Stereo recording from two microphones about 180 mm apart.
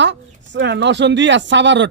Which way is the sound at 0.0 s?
80° right.